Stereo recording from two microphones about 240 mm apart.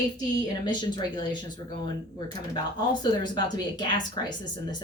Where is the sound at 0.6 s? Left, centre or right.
Centre.